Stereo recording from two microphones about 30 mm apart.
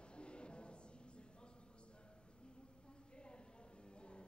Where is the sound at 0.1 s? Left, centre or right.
Left.